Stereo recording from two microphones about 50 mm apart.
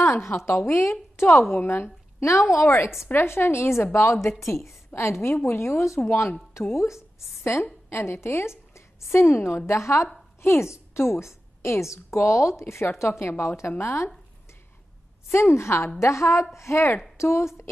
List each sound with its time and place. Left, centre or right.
0.1 s a woman's voice: left
6.0 s a woman's voice: left
7.2 s a woman's voice: left
10.4 s a woman's voice: left
13.2 s a woman's voice: left
15.3 s a woman's voice: left
16.0 s a woman's voice: left